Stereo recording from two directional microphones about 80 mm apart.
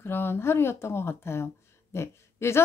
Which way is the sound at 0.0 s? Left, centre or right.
Left.